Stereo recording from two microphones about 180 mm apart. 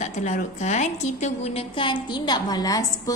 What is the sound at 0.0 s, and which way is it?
A woman's voice, 40° left (ahead or behind).